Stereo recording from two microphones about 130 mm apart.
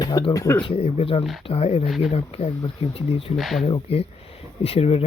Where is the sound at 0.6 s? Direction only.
50° left (ahead or behind).